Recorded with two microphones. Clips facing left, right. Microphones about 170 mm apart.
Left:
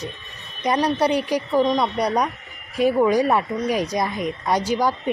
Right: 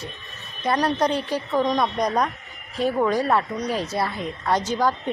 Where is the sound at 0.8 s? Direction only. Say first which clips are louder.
Left 3 dB; 5° left (ahead or behind).